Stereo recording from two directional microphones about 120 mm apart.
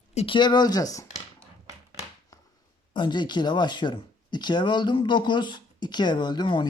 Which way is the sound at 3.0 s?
40° left (ahead or behind).